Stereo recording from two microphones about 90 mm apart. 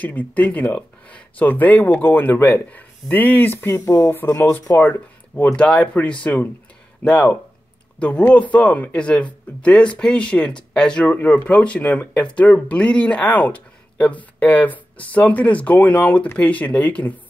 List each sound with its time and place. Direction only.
0.0 s speech: 15° left (ahead or behind)
3.8 s speech: 45° left (ahead or behind)
4.1 s speech: 25° left (ahead or behind)